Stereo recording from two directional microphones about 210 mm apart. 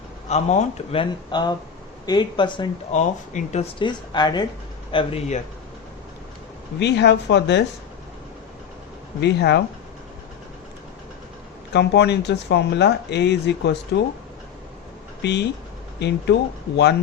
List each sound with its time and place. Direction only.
0.3 s speech: 30° left (ahead or behind)
2.9 s speech: 35° left (ahead or behind)
6.7 s speech: 55° left (ahead or behind)
9.2 s speech: 55° left (ahead or behind)
11.7 s speech: 55° left (ahead or behind)
15.2 s speech: 55° left (ahead or behind)